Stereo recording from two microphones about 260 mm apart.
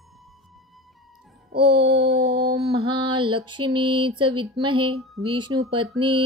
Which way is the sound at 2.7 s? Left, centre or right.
Right.